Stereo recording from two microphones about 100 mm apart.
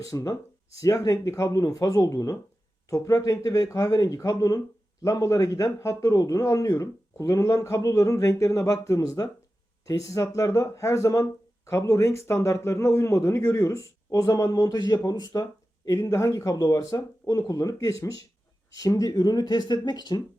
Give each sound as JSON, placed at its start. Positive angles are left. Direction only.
{"t": 0.0, "sound": "speech", "side_deg": 35}